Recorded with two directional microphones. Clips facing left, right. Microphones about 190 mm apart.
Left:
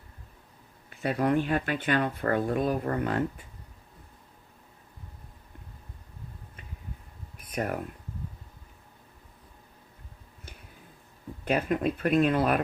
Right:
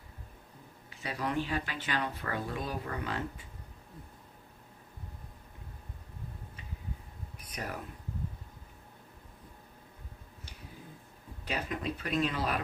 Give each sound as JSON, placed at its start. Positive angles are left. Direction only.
{"t": 0.9, "sound": "speech", "side_deg": 55}
{"t": 7.4, "sound": "a sound", "side_deg": 55}
{"t": 11.4, "sound": "speech", "side_deg": 55}